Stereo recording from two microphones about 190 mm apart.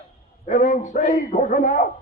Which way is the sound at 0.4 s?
40° left (ahead or behind).